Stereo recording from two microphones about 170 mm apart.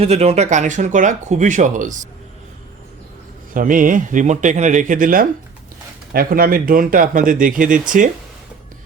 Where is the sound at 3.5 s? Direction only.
50° right (ahead or behind).